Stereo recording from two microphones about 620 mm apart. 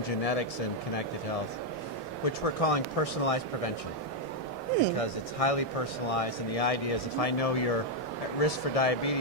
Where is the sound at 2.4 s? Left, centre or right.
Left.